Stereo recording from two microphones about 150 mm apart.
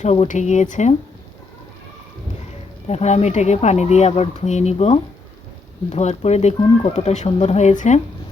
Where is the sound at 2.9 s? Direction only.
45° left (ahead or behind).